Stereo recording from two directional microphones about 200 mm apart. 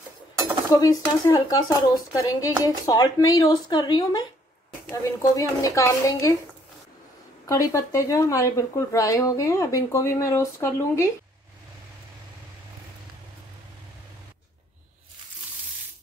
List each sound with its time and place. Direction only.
0.7 s speech: 15° left (ahead or behind)
7.4 s speech: 15° left (ahead or behind)